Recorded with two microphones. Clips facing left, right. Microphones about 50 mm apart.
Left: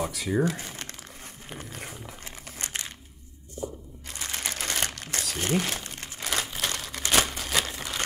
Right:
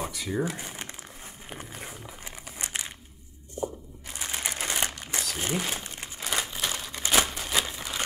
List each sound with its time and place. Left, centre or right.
0.1 s speech: centre
0.6 s crumpling: centre
1.8 s a sound: centre
2.2 s crumpling: centre
3.6 s crunch: right
4.1 s crumpling: centre